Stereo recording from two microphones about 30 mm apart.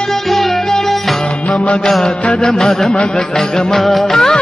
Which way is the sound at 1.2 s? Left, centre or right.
Left.